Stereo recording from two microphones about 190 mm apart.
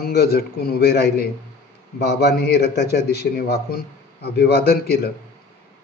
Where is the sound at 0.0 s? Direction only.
55° left (ahead or behind).